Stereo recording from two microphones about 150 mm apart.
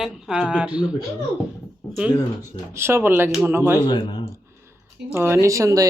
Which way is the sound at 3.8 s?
35° left (ahead or behind).